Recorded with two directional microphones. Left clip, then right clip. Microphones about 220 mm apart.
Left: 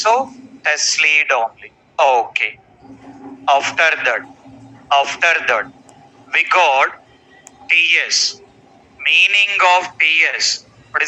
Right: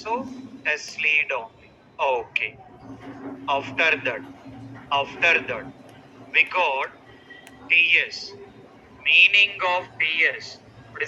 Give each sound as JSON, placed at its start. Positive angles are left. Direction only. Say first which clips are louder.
{"t": 0.6, "sound": "a man's voice", "louder": "left 9 dB", "side_deg": 40}